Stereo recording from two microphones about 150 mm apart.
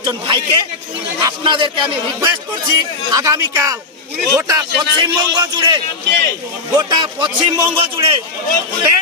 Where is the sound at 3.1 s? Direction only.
20° right (ahead or behind).